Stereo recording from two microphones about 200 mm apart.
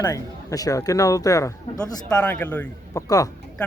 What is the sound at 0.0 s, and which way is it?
Speech, 15° left (ahead or behind).